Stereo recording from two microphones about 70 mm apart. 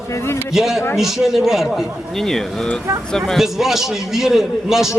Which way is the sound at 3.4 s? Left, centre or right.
Centre.